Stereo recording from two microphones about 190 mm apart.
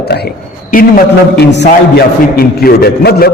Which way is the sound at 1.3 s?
60° left (ahead or behind).